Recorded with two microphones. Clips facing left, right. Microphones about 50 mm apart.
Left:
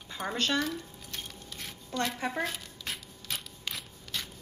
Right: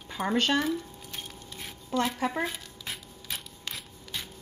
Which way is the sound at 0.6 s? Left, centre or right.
Centre.